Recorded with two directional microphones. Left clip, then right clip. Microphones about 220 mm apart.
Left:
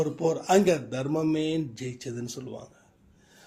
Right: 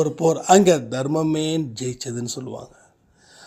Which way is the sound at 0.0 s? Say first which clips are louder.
Right 7 dB; 40° right (ahead or behind).